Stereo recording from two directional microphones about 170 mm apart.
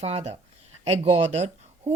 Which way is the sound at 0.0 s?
40° right (ahead or behind).